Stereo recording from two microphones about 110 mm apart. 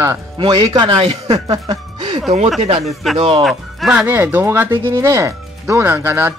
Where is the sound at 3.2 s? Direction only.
60° right (ahead or behind).